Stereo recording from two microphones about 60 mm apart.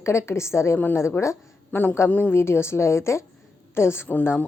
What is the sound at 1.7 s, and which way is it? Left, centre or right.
Speech, left.